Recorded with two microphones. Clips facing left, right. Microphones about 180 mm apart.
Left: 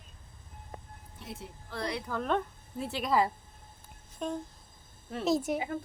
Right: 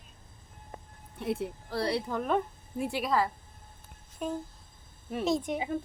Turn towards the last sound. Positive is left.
turn(degrees=5)  # may be behind; listen again after turning